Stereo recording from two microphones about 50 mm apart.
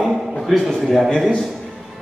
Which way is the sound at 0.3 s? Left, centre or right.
Centre.